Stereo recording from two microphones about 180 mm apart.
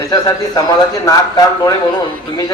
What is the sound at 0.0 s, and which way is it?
A man's voice, 20° left (ahead or behind).